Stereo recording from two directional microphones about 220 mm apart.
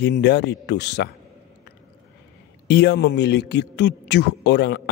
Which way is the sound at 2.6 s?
50° left (ahead or behind).